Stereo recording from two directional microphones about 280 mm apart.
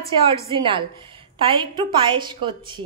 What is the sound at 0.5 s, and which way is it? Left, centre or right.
A woman's voice, centre.